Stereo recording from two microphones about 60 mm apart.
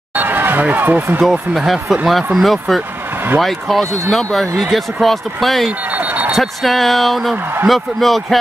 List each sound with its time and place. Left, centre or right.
0.2 s speech: right
1.7 s speech: centre
5.9 s a sound: right
6.3 s speech: centre